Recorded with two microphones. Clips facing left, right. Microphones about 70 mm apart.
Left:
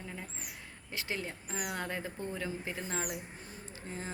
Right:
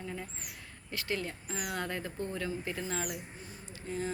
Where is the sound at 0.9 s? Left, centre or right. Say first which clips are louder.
Right 3 dB; left.